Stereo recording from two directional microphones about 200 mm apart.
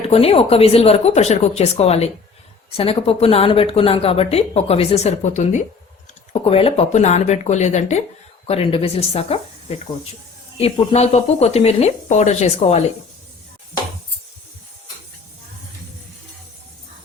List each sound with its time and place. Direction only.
0.1 s speech: 30° left (ahead or behind)